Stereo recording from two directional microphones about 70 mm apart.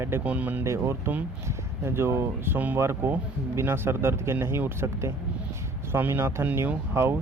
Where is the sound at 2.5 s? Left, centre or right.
Right.